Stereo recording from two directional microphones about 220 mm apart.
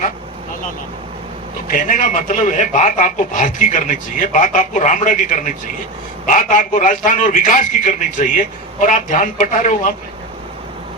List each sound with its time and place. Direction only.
1.6 s speech: 40° left (ahead or behind)